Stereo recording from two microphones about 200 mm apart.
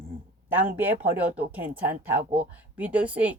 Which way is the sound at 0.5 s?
10° right (ahead or behind).